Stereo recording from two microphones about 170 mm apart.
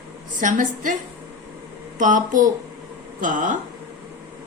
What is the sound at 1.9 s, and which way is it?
Speech, 50° right (ahead or behind).